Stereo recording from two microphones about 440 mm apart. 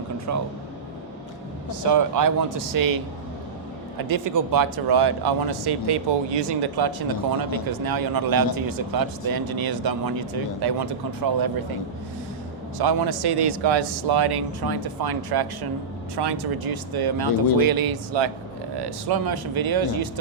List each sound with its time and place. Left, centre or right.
0.3 s speech: right
1.9 s speech: right
4.1 s speech: right
12.8 s speech: right